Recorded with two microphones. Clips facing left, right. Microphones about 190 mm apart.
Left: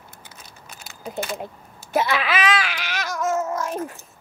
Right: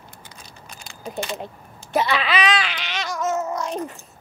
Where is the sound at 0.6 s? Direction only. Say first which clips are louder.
Even; 5° left (ahead or behind).